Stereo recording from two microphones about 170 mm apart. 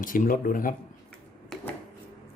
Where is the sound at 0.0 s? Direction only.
55° left (ahead or behind).